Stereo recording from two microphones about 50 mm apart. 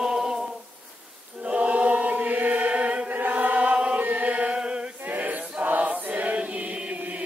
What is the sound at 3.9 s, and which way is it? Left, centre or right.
Chant, right.